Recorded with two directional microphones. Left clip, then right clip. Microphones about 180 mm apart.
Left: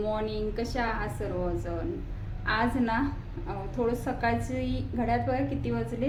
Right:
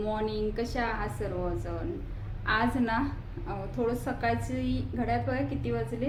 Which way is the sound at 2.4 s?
5° left (ahead or behind).